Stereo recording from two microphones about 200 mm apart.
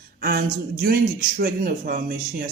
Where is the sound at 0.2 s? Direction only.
45° right (ahead or behind).